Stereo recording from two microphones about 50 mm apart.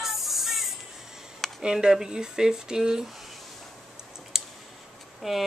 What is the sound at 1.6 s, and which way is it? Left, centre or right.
Speech, centre.